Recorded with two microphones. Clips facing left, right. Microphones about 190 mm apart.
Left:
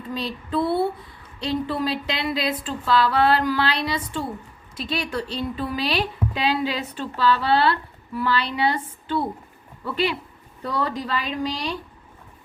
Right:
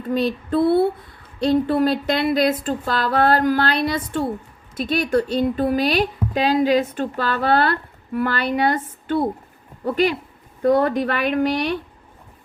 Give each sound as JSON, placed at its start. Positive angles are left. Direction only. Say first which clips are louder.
{"t": 0.1, "sound": "speech", "louder": "right 7 dB", "side_deg": -55}